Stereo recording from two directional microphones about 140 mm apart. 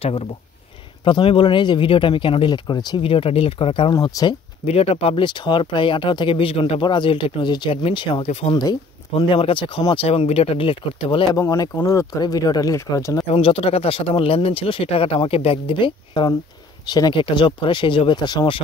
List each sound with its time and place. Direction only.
1.0 s speech: 35° left (ahead or behind)
3.1 s speech: 40° left (ahead or behind)
3.9 s speech: 30° left (ahead or behind)
4.6 s speech: 45° left (ahead or behind)
11.3 s speech: 25° left (ahead or behind)
13.3 s speech: 45° left (ahead or behind)